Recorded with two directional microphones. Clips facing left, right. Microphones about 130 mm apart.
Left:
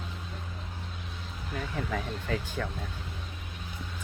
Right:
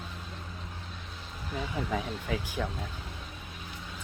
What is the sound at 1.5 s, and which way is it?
Speech, 10° right (ahead or behind).